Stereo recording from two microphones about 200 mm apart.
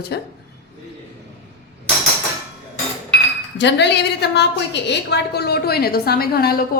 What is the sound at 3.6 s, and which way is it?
A woman's voice, 60° left (ahead or behind).